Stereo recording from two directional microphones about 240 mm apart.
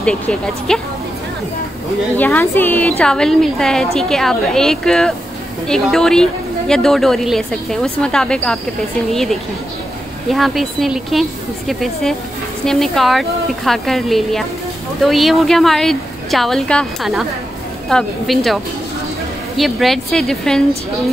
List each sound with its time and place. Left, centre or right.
0.0 s a woman's voice: centre
2.1 s a woman's voice: centre